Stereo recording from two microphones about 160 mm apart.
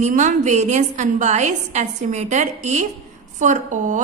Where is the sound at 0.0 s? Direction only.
50° right (ahead or behind).